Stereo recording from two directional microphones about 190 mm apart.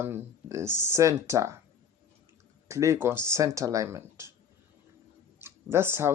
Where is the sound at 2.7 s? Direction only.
15° right (ahead or behind).